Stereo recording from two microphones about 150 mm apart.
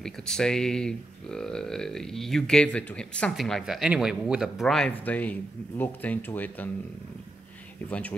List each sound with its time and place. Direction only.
0.0 s speech: 5° left (ahead or behind)